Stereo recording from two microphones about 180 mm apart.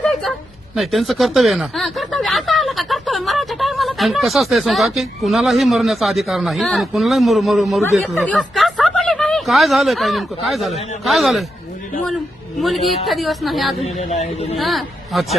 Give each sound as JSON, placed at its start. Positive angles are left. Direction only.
{"t": 0.0, "sound": "a sound", "side_deg": 0}
{"t": 0.8, "sound": "speech", "side_deg": 0}
{"t": 12.5, "sound": "a woman's voice", "side_deg": 0}
{"t": 13.8, "sound": "a man's voice", "side_deg": 40}
{"t": 14.6, "sound": "a woman's voice", "side_deg": 0}